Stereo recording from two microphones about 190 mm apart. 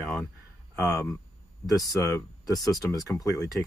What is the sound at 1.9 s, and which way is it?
Speech, 20° left (ahead or behind).